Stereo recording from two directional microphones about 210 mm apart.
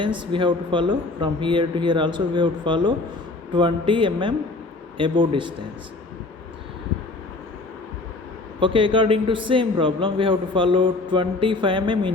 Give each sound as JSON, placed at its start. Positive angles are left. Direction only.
{"t": 0.0, "sound": "a man's voice", "side_deg": -20}
{"t": 8.6, "sound": "a man's voice", "side_deg": -25}